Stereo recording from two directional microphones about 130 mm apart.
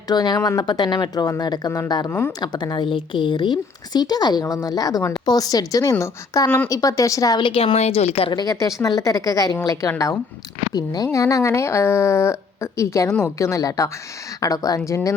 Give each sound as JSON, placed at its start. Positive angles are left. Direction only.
{"t": 0.1, "sound": "a woman's voice", "side_deg": 30}
{"t": 2.0, "sound": "speech", "side_deg": 15}
{"t": 2.4, "sound": "a woman's voice", "side_deg": 35}
{"t": 8.3, "sound": "speech", "side_deg": 30}